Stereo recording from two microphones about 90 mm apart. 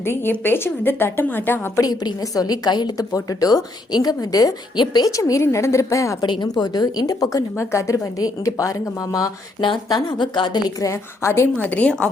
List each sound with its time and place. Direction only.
0.0 s a woman's voice: 25° left (ahead or behind)
1.8 s a woman's voice: 45° left (ahead or behind)
6.4 s a woman's voice: 50° left (ahead or behind)
7.5 s a woman's voice: 30° left (ahead or behind)
9.6 s a woman's voice: 55° left (ahead or behind); by 12.1 s 15° left (ahead or behind)